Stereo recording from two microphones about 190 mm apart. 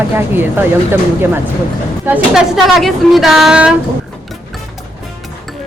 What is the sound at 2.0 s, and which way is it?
A woman's voice, 5° right (ahead or behind).